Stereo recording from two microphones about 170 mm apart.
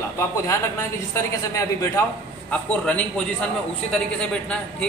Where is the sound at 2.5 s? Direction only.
5° left (ahead or behind).